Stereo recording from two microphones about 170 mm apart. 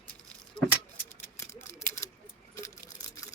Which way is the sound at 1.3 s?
15° left (ahead or behind).